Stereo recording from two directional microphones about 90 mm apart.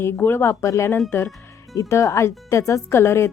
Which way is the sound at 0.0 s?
25° left (ahead or behind).